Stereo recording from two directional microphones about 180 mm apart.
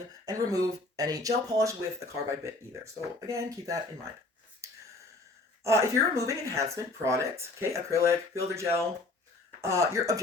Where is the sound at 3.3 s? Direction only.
20° right (ahead or behind).